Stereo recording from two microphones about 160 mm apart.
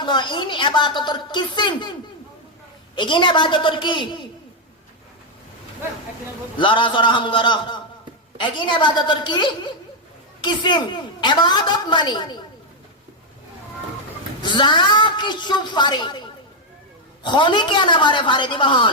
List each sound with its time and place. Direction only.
0.0 s a woman's voice: 30° left (ahead or behind)
2.9 s a woman's voice: 30° left (ahead or behind)
6.6 s a woman's voice: 30° left (ahead or behind)
14.4 s a woman's voice: 30° left (ahead or behind)